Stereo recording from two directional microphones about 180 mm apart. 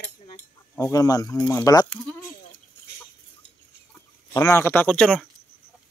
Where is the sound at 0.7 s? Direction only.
20° left (ahead or behind).